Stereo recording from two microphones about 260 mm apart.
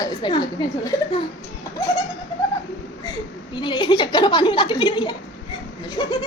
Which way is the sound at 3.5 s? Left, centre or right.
Centre.